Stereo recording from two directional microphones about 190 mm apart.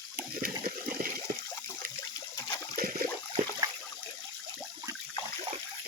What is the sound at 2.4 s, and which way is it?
Water, 15° left (ahead or behind).